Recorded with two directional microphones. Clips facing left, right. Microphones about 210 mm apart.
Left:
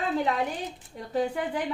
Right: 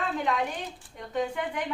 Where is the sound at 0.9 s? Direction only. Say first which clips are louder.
Left 2 dB; 35° left (ahead or behind).